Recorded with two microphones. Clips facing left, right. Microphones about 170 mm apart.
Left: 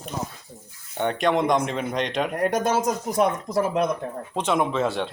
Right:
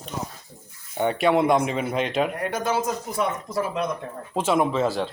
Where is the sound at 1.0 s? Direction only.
5° right (ahead or behind).